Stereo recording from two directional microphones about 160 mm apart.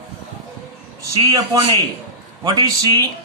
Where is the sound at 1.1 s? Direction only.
25° right (ahead or behind).